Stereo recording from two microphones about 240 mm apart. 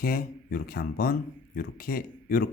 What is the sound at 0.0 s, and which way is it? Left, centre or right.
Speech, left.